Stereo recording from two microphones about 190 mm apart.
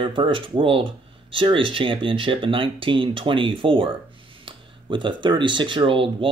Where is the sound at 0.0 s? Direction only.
25° right (ahead or behind).